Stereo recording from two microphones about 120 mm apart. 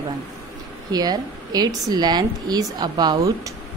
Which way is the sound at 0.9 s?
35° right (ahead or behind).